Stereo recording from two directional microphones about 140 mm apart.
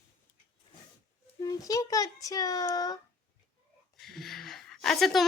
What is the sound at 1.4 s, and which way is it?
A child's voice, 25° left (ahead or behind).